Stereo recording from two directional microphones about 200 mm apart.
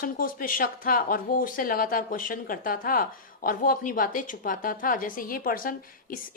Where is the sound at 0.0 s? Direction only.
45° left (ahead or behind).